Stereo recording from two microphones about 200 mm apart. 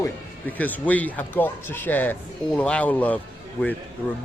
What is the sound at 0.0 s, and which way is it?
Speech, 10° left (ahead or behind).